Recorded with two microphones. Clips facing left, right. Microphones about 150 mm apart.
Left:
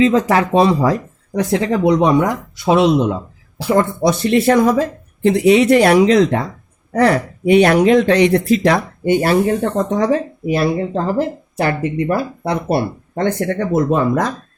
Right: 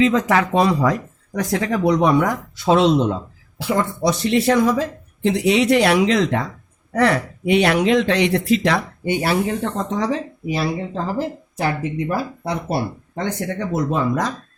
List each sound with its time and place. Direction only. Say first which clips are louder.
0.0 s speech: left 3 dB; 35° left (ahead or behind); by 3.2 s 5° left (ahead or behind)
3.6 s speech: left 6 dB; 40° left (ahead or behind)
4.0 s speech: left 4 dB; 55° left (ahead or behind)
6.0 s speech: left 5 dB; 35° left (ahead or behind); by 14.3 s 55° left (ahead or behind)